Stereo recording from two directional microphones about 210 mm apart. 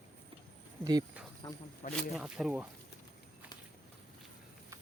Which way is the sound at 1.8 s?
40° left (ahead or behind).